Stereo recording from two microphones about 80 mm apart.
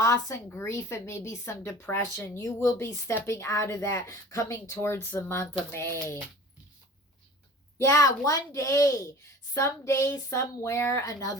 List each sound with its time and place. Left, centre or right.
0.0 s a woman's voice: left
0.4 s speech: left
7.8 s speech: left
11.0 s speech: left